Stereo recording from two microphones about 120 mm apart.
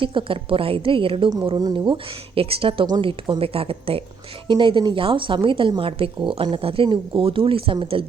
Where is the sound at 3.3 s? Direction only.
50° right (ahead or behind).